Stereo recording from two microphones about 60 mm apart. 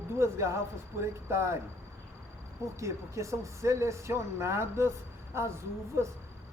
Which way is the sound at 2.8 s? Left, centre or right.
Right.